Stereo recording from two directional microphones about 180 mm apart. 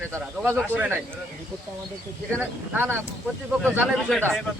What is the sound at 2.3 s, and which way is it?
Speech, 10° right (ahead or behind).